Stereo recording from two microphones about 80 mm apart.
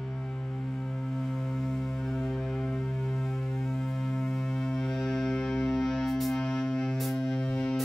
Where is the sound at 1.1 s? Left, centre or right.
Centre.